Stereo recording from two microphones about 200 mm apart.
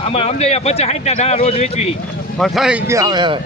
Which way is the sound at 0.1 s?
30° left (ahead or behind).